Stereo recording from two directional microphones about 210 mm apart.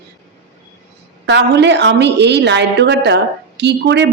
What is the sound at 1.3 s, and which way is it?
A woman's voice, 55° right (ahead or behind).